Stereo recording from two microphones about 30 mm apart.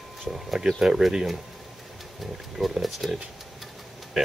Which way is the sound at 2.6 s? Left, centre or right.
Centre.